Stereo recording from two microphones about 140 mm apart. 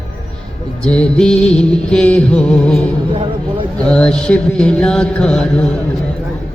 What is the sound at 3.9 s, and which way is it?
Music, 5° left (ahead or behind).